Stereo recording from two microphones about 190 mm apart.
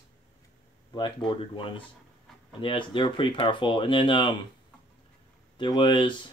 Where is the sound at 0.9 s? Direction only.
25° left (ahead or behind).